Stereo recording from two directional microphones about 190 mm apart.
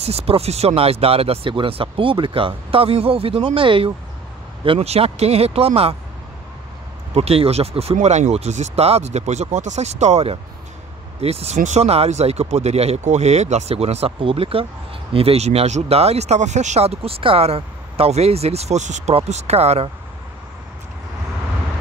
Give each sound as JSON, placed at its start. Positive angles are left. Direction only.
{"t": 0.0, "sound": "speech", "side_deg": -30}
{"t": 7.2, "sound": "speech", "side_deg": -30}